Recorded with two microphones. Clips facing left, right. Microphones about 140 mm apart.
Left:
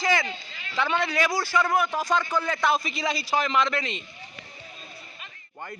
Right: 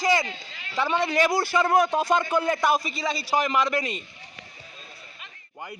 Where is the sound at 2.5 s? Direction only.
15° right (ahead or behind).